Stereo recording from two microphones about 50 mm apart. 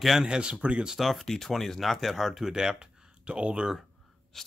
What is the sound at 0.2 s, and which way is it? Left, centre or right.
Speech, centre.